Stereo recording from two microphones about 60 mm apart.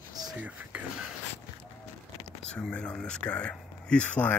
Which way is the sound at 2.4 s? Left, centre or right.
Centre.